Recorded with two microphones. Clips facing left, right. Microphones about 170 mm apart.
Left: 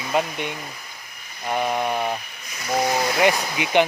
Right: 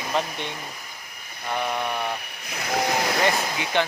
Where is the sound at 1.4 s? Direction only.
15° left (ahead or behind).